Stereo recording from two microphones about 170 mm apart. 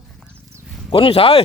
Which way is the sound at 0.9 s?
30° left (ahead or behind).